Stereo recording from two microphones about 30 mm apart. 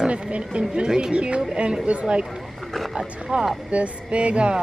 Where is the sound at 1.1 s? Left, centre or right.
Right.